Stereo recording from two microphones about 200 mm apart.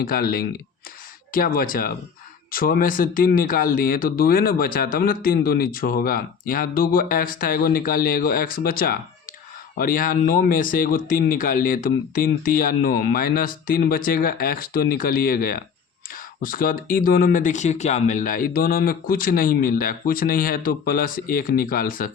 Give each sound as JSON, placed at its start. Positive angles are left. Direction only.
{"t": 0.0, "sound": "speech", "side_deg": 45}